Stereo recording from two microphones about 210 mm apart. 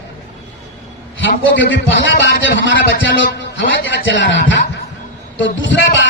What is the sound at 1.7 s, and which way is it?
A man's voice, 55° left (ahead or behind).